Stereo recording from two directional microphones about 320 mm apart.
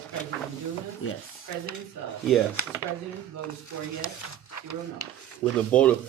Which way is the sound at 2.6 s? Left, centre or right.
Left.